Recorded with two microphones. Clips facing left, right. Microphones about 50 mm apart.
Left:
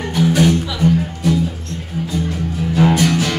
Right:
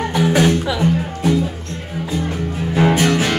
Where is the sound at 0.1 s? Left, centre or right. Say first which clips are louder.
Left 1 dB; right.